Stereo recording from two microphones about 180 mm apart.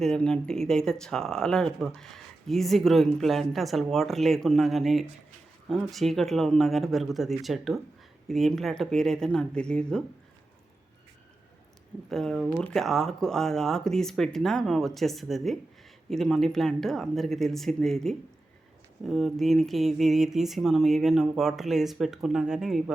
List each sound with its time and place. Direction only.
0.0 s speech: 5° left (ahead or behind)
12.0 s speech: centre (ahead or behind)